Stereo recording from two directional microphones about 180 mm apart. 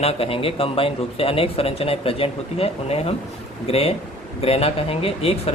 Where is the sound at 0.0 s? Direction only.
35° left (ahead or behind).